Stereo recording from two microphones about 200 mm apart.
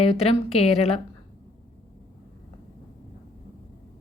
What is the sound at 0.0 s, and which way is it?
A woman's voice, 30° left (ahead or behind).